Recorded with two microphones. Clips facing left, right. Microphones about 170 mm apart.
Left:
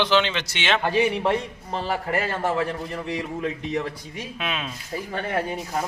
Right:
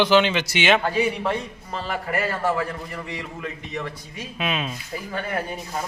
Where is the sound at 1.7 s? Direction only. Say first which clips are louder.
Left 2 dB; 20° left (ahead or behind).